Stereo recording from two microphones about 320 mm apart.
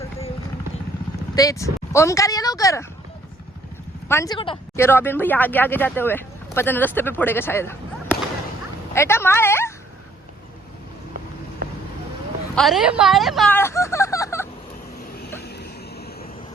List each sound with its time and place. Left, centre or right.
1.4 s speech: centre
4.1 s speech: centre
12.5 s speech: centre
15.4 s vehicle: left